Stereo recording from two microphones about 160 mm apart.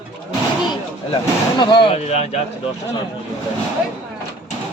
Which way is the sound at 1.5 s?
30° left (ahead or behind).